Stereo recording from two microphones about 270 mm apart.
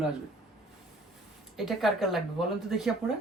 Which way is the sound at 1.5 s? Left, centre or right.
Centre.